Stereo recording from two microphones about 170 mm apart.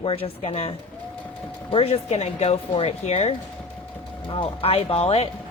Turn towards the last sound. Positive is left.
turn(degrees=35)  # may be behind; listen again after turning